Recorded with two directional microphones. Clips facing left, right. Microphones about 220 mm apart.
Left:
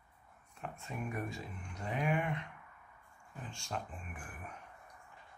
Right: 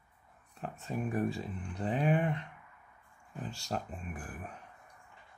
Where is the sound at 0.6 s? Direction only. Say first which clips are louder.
Right 5 dB; 35° right (ahead or behind).